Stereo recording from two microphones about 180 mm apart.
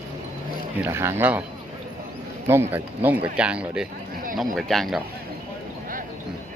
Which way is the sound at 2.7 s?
10° right (ahead or behind).